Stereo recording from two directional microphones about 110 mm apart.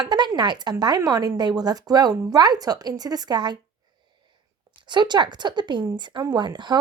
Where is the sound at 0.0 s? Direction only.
45° right (ahead or behind).